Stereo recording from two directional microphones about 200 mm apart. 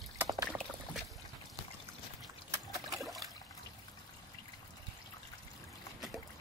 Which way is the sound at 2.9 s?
Centre (ahead or behind).